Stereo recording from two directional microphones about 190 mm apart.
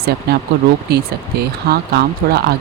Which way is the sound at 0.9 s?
55° right (ahead or behind).